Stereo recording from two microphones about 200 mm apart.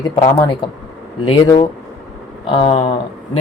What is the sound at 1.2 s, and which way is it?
Speech, 20° left (ahead or behind).